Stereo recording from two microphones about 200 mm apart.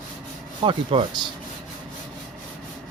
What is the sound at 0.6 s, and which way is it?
Rub, 25° right (ahead or behind).